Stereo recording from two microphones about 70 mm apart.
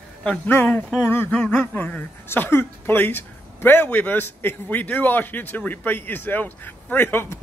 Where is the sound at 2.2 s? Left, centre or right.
Left.